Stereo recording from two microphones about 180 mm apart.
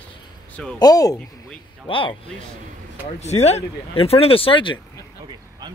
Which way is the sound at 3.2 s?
35° left (ahead or behind).